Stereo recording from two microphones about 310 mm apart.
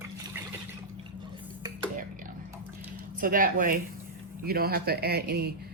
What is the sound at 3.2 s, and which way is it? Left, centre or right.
Speech, right.